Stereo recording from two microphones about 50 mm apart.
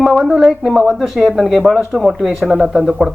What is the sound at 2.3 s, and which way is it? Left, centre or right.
Speech, centre.